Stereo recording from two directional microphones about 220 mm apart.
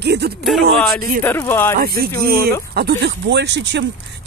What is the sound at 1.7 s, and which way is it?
Speech, 45° right (ahead or behind).